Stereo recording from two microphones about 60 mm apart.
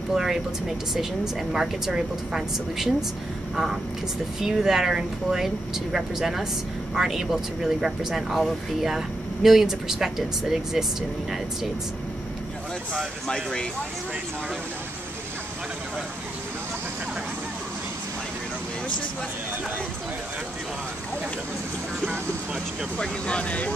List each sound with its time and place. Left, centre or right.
0.1 s speech: centre
13.3 s speech: centre
22.9 s speech: centre